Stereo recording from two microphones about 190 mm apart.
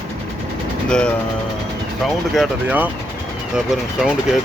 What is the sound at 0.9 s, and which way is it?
Speech, 5° left (ahead or behind).